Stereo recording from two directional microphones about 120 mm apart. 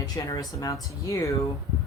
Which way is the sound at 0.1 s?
25° left (ahead or behind).